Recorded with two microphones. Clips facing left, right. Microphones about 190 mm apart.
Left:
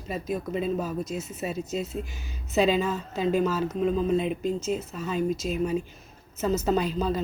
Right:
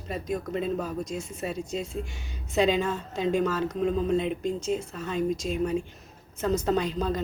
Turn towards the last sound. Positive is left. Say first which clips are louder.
# left 1 dB
turn(degrees=10)  # may be behind; listen again after turning